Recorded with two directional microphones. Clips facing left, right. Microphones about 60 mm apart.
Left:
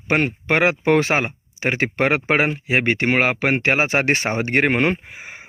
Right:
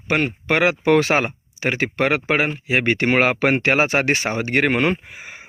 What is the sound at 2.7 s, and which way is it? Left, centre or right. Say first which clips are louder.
Speech: right 1 dB; centre.